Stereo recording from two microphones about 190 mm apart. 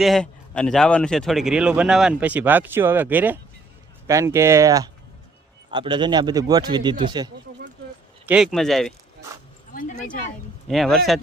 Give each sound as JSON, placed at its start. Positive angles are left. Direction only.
{"t": 0.0, "sound": "a man's voice", "side_deg": 0}
{"t": 8.3, "sound": "speech", "side_deg": 0}
{"t": 10.7, "sound": "speech", "side_deg": 0}